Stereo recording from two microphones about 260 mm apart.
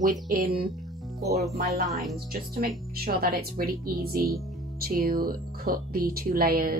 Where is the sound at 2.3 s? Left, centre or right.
Right.